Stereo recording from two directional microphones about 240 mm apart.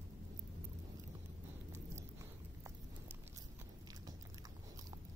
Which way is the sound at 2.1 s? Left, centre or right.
Centre.